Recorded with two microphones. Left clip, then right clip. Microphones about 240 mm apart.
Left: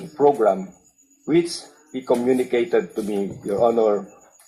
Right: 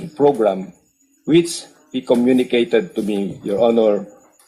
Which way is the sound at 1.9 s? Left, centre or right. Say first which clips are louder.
Right 4 dB; right.